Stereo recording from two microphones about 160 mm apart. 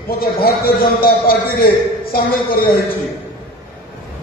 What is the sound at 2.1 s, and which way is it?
Speech, 65° left (ahead or behind).